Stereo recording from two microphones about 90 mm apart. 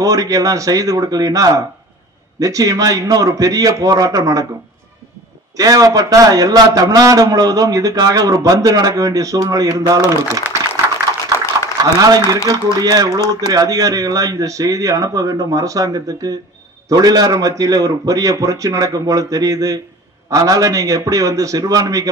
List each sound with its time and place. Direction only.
0.0 s a man's voice: 40° right (ahead or behind)
5.6 s a man's voice: 45° right (ahead or behind)
11.8 s a man's voice: 45° right (ahead or behind)